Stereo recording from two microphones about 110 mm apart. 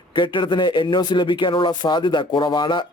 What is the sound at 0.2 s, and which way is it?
A man's voice, 45° left (ahead or behind).